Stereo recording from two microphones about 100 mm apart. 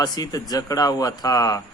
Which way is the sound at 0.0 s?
40° left (ahead or behind).